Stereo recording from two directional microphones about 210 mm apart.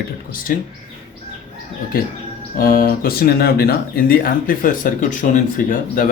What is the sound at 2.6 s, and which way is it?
Speech, 45° left (ahead or behind).